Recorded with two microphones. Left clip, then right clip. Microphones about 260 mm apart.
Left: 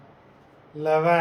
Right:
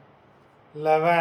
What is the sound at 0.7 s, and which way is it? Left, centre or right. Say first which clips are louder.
Speech: even; centre.